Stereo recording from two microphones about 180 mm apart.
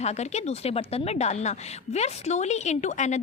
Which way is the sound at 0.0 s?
40° left (ahead or behind).